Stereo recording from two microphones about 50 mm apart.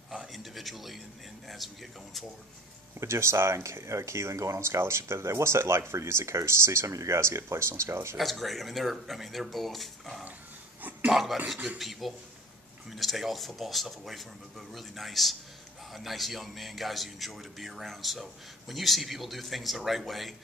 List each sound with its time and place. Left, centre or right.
0.3 s a sound: centre
1.5 s a man's voice: centre
3.0 s speech: right
8.2 s a man's voice: centre